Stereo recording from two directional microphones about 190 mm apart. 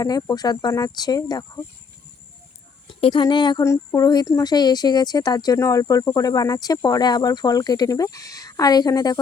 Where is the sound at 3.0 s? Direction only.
25° left (ahead or behind).